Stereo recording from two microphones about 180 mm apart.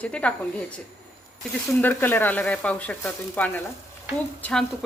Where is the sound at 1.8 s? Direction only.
10° left (ahead or behind).